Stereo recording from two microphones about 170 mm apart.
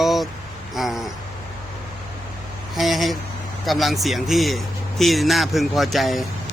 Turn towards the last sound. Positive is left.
turn(degrees=0)  # may be behind; listen again after turning